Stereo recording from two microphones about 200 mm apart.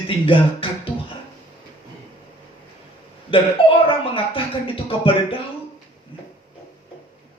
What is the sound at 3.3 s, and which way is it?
Speech, 25° left (ahead or behind).